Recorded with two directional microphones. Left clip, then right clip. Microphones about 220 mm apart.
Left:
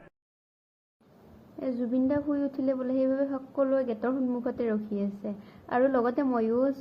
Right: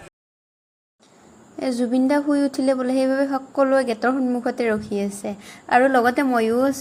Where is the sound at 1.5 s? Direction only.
20° right (ahead or behind).